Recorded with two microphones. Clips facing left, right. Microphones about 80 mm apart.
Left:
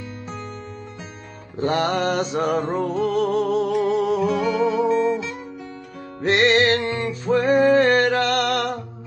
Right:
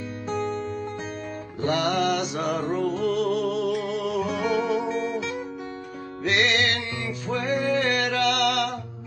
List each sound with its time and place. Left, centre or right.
1.6 s music: left
6.2 s music: left